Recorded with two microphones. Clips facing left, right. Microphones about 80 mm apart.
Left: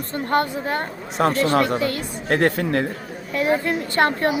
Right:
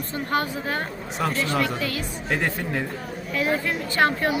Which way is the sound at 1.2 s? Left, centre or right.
Left.